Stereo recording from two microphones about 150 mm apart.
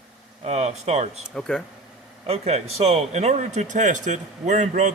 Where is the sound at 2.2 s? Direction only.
45° right (ahead or behind).